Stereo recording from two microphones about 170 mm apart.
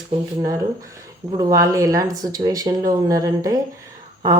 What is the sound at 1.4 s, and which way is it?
Speech, 20° right (ahead or behind).